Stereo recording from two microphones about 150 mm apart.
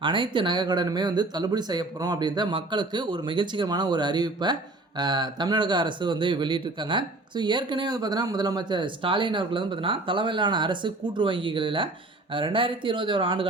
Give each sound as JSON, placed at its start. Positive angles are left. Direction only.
{"t": 0.0, "sound": "speech", "side_deg": -35}